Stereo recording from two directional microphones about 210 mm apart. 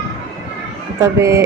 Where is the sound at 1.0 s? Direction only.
15° right (ahead or behind).